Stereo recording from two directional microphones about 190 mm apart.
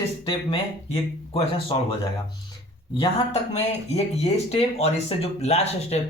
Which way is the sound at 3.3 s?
35° left (ahead or behind).